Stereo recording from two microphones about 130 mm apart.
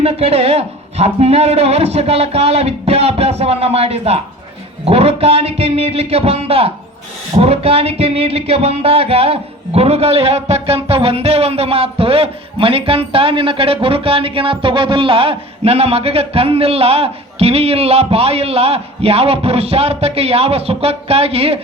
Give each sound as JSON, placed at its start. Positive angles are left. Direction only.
{"t": 0.0, "sound": "speech", "side_deg": -50}